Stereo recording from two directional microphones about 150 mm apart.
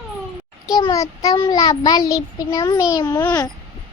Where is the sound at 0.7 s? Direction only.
25° left (ahead or behind).